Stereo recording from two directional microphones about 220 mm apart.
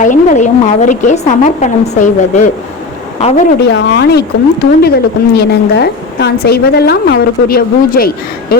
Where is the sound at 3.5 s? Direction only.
50° left (ahead or behind).